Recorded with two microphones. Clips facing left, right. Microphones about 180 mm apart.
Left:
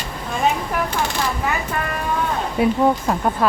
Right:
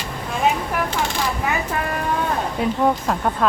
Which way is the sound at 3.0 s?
5° left (ahead or behind).